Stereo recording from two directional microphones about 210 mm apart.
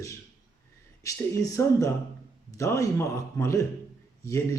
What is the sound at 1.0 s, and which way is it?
Speech, 15° left (ahead or behind).